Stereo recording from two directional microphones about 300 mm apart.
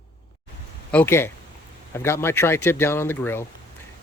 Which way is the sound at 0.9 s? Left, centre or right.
Centre.